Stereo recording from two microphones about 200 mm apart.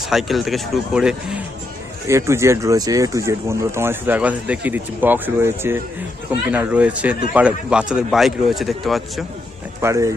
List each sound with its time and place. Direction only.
0.1 s speech: centre (ahead or behind)
9.8 s speech: 15° right (ahead or behind)